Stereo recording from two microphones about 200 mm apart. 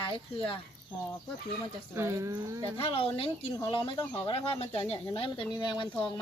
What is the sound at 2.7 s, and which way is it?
Speech, 30° left (ahead or behind).